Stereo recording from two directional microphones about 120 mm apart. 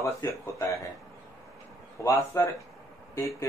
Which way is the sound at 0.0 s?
25° left (ahead or behind).